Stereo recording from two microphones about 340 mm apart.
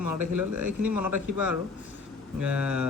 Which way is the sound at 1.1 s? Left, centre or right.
Right.